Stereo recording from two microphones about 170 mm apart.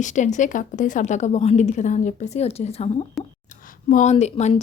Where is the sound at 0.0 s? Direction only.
45° left (ahead or behind).